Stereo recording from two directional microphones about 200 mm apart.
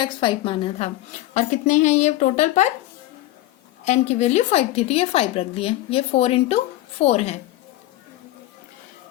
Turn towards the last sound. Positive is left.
turn(degrees=30)  # may be behind; listen again after turning